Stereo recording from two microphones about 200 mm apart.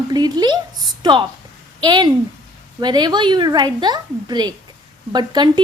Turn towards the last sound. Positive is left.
turn(degrees=-20)  # may be behind; listen again after turning